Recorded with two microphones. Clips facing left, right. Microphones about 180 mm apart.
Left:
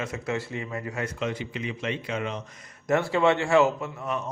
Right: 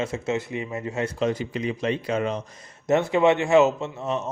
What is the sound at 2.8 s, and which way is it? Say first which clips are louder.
Speech: right 3 dB; 20° right (ahead or behind).